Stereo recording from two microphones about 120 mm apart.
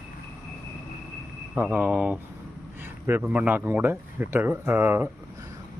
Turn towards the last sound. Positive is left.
turn(degrees=-15)  # may be behind; listen again after turning